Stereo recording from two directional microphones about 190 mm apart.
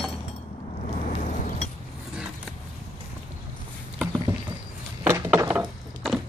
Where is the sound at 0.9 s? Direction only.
40° left (ahead or behind).